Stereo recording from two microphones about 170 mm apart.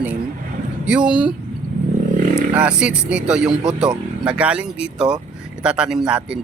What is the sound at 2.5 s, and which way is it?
Speech, 5° right (ahead or behind).